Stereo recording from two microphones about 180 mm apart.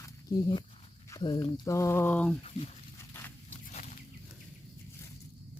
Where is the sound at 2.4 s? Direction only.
35° left (ahead or behind).